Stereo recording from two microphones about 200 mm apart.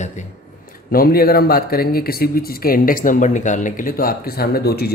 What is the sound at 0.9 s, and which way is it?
Speech, 50° left (ahead or behind).